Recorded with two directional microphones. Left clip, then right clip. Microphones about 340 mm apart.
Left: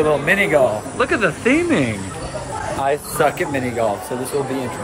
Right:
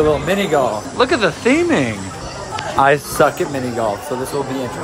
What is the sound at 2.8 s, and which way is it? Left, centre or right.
Speech, right.